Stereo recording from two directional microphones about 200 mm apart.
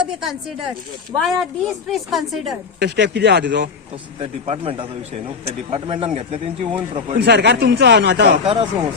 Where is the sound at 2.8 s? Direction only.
60° right (ahead or behind).